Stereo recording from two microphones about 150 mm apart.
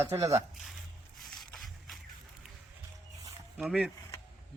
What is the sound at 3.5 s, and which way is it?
Speech, 10° right (ahead or behind).